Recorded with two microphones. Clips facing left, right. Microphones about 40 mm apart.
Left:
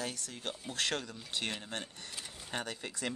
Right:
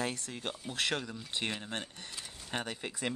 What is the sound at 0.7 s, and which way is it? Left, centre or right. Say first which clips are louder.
Speech: right 2 dB; centre.